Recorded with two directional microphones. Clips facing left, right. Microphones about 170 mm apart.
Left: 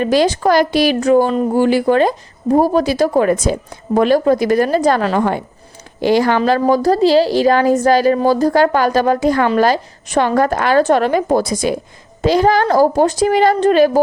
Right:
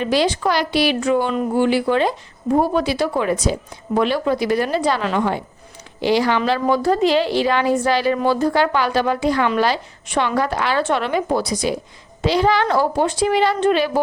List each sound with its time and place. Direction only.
0.0 s a woman's voice: 45° left (ahead or behind)